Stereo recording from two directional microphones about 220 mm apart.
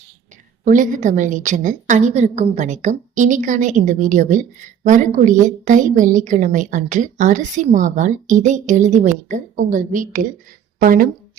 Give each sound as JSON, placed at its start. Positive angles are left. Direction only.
{"t": 0.6, "sound": "a woman's voice", "side_deg": -35}